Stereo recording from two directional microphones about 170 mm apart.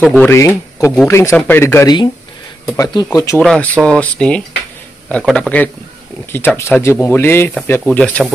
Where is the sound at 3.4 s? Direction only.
Centre (ahead or behind).